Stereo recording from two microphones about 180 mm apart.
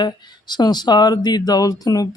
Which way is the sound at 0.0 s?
25° left (ahead or behind).